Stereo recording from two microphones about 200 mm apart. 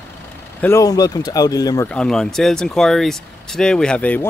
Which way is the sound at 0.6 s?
15° left (ahead or behind).